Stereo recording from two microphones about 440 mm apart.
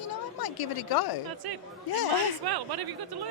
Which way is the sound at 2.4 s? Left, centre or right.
Right.